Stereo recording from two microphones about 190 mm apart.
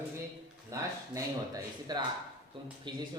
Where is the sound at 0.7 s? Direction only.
15° right (ahead or behind).